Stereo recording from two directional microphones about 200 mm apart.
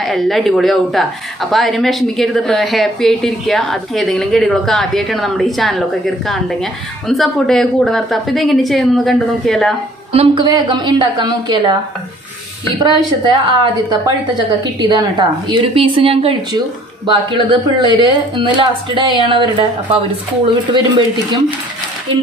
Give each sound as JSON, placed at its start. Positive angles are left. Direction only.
{"t": 0.0, "sound": "speech", "side_deg": 0}
{"t": 10.1, "sound": "a woman's voice", "side_deg": -20}